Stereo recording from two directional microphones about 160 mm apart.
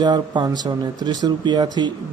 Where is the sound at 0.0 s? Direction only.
25° right (ahead or behind).